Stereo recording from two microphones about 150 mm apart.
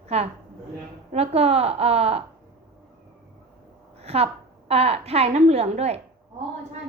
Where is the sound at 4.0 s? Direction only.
45° right (ahead or behind).